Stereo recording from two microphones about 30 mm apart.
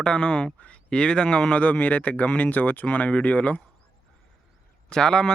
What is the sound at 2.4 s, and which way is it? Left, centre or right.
Speech, left.